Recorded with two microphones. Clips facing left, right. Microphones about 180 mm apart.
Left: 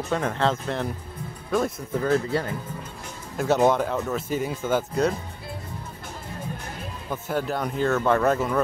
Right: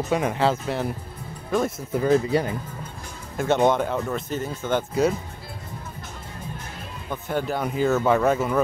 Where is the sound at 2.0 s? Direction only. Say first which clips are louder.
Right 4 dB; 15° right (ahead or behind).